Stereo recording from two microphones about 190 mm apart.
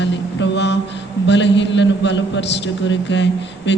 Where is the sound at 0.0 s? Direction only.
70° left (ahead or behind).